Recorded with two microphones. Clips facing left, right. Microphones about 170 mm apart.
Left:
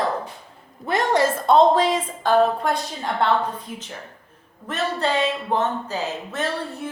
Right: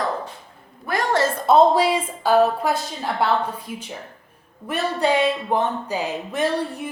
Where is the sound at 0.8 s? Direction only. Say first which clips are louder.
Left 1 dB; 20° left (ahead or behind).